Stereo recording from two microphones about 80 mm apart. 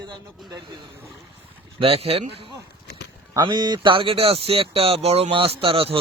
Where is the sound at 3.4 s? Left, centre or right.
Right.